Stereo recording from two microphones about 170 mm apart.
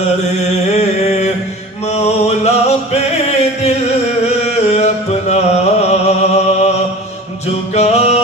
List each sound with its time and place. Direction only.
0.7 s mantra: 40° left (ahead or behind)
1.9 s music: 40° left (ahead or behind)
4.6 s music: 40° left (ahead or behind)
7.7 s music: 40° left (ahead or behind)